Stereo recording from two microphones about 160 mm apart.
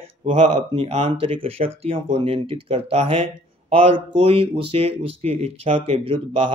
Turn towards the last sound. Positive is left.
turn(degrees=-35)  # may be behind; listen again after turning